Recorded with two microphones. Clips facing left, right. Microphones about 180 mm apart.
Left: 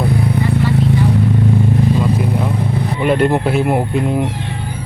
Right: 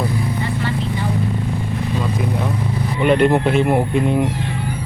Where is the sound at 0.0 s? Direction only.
65° left (ahead or behind).